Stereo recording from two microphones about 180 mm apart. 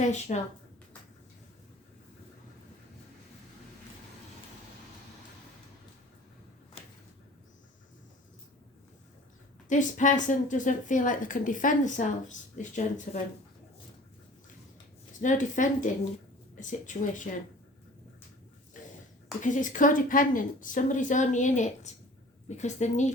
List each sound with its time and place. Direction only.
0.0 s a woman's voice: 40° left (ahead or behind)
9.6 s a woman's voice: 45° left (ahead or behind)
15.2 s a woman's voice: 45° left (ahead or behind)
18.8 s a sound: 45° left (ahead or behind)
19.4 s a woman's voice: 45° left (ahead or behind)